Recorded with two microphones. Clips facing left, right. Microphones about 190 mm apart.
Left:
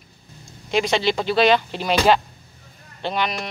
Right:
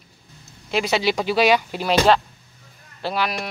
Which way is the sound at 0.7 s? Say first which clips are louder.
Left 1 dB; 5° right (ahead or behind).